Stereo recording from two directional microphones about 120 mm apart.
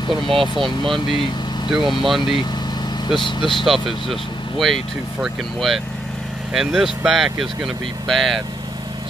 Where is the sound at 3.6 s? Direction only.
Centre (ahead or behind).